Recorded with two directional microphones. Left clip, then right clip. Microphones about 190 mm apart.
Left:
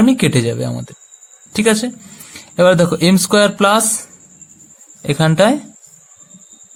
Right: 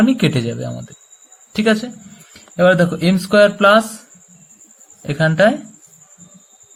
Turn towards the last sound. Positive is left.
turn(degrees=40)  # may be behind; listen again after turning